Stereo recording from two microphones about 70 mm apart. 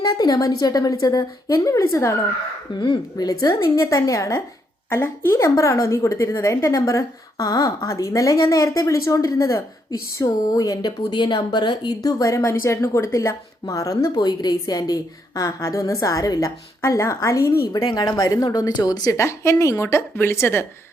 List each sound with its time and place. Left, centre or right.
0.3 s a woman's voice: left
2.7 s speech: left
3.6 s speech: left
4.9 s speech: left
12.2 s speech: left
17.9 s a woman's voice: left
19.1 s a woman's voice: left